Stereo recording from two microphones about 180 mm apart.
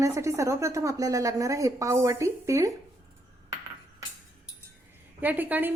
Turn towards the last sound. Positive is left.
turn(degrees=-10)  # may be behind; listen again after turning